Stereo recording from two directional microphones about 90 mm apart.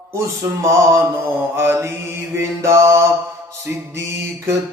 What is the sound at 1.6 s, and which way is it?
Mantra, 30° right (ahead or behind).